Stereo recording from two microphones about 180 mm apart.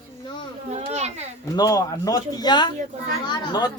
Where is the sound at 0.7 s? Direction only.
40° right (ahead or behind).